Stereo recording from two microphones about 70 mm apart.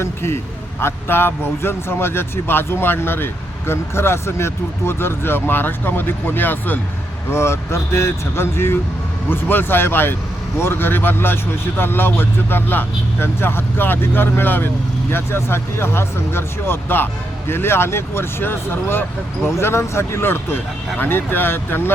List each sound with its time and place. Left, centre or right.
0.0 s speech: left
7.3 s speech: left